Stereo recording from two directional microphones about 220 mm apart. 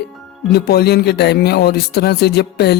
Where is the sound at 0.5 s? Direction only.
45° left (ahead or behind).